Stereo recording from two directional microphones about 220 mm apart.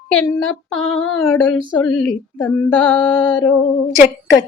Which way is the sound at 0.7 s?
Centre (ahead or behind).